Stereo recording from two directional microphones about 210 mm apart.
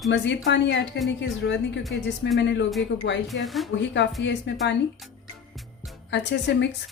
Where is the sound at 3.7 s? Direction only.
55° left (ahead or behind).